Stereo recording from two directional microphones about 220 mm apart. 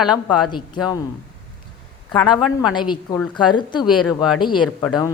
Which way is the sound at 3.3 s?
20° left (ahead or behind).